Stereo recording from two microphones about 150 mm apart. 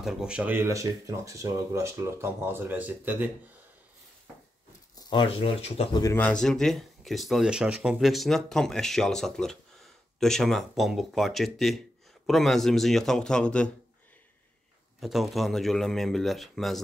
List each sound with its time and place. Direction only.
0.0 s speech: 5° right (ahead or behind)
5.1 s speech: 40° left (ahead or behind)
6.1 s speech: 5° left (ahead or behind)
15.0 s speech: centre (ahead or behind)